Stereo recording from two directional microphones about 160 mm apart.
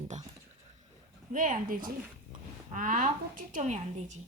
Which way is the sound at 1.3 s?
55° right (ahead or behind).